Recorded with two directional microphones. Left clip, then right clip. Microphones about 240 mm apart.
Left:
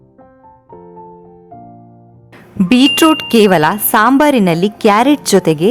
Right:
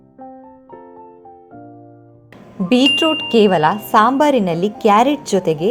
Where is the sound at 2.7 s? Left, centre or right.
Left.